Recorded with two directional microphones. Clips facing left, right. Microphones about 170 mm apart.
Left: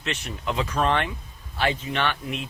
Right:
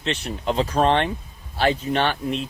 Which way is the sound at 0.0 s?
30° right (ahead or behind).